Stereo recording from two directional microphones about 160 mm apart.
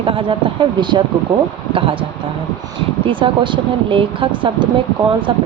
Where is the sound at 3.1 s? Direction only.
30° right (ahead or behind).